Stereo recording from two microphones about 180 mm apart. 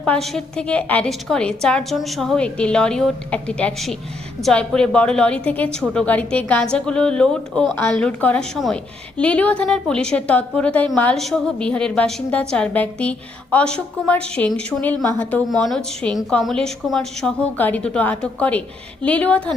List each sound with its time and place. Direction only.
0.0 s a woman's voice: 5° left (ahead or behind)